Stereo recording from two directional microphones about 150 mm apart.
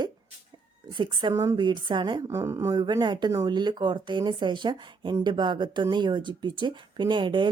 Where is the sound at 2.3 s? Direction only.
20° right (ahead or behind).